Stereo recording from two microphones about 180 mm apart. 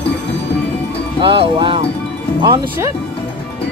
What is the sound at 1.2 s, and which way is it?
Speech, 30° right (ahead or behind).